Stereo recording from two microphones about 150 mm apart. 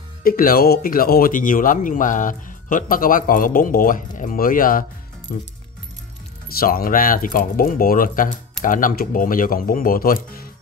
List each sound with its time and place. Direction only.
0.2 s speech: 75° left (ahead or behind)
6.6 s speech: 75° left (ahead or behind)